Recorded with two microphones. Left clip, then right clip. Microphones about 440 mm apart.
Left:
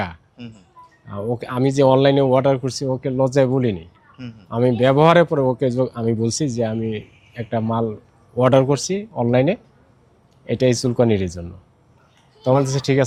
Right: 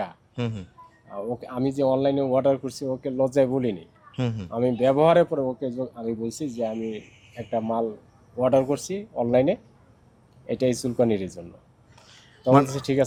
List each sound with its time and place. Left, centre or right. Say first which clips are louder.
1.1 s speech: left 6 dB; left
4.2 s speech: right 8 dB; right
4.4 s speech: left 5 dB; left
12.6 s speech: left 4 dB; left